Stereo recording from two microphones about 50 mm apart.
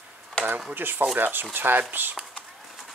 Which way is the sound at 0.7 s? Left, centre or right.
Right.